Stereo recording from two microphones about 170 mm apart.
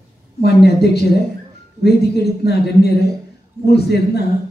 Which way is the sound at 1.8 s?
75° left (ahead or behind).